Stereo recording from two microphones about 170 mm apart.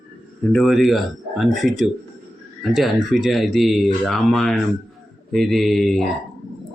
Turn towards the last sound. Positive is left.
turn(degrees=0)  # may be behind; listen again after turning